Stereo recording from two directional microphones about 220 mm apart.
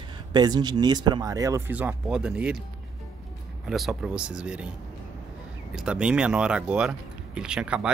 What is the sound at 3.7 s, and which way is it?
Speech, centre (ahead or behind).